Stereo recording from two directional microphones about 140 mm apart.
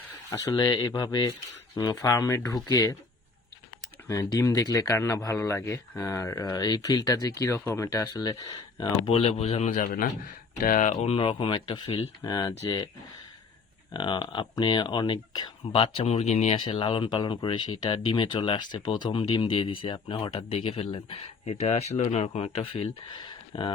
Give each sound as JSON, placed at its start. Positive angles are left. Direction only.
{"t": 0.3, "sound": "speech", "side_deg": 25}
{"t": 4.1, "sound": "speech", "side_deg": 20}
{"t": 9.0, "sound": "a man's voice", "side_deg": 45}
{"t": 9.7, "sound": "a man's voice", "side_deg": 90}
{"t": 10.6, "sound": "speech", "side_deg": 70}
{"t": 11.0, "sound": "speech", "side_deg": 40}
{"t": 13.9, "sound": "speech", "side_deg": 35}
{"t": 16.6, "sound": "speech", "side_deg": 40}